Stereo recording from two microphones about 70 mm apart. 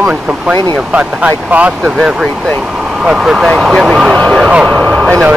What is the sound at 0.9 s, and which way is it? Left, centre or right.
Speech, centre.